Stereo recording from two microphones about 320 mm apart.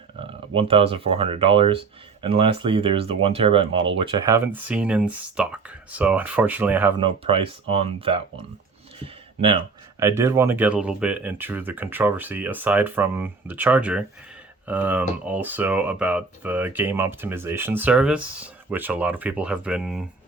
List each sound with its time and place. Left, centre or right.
0.2 s speech: centre
7.0 s speech: centre
10.0 s speech: centre